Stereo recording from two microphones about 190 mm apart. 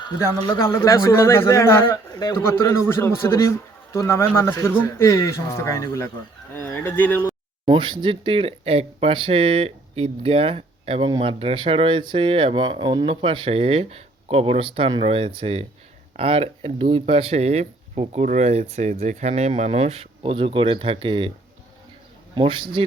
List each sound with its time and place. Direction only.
0.2 s a man's voice: 15° left (ahead or behind)
7.6 s speech: 25° right (ahead or behind)
22.4 s speech: 25° right (ahead or behind)